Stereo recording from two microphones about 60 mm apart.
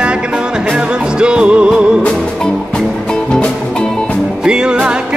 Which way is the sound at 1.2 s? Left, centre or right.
Centre.